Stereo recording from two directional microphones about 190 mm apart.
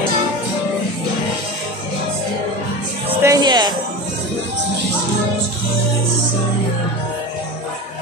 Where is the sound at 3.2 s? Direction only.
20° right (ahead or behind).